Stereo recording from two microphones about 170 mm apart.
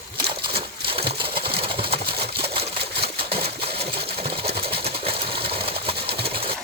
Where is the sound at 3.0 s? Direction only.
65° right (ahead or behind).